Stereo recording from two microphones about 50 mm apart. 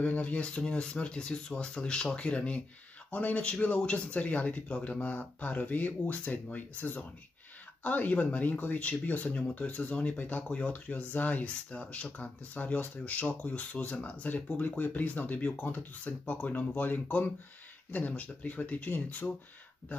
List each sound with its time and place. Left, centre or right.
0.0 s speech: left